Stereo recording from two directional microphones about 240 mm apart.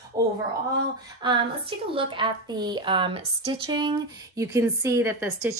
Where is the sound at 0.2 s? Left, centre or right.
Centre.